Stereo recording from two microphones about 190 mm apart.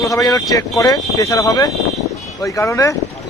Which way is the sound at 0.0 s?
15° left (ahead or behind).